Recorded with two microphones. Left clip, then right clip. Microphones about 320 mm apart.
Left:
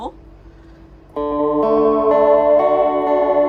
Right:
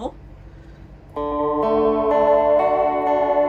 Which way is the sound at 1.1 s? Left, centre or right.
Left.